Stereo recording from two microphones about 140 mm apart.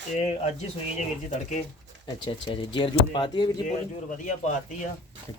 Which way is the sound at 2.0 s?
35° left (ahead or behind).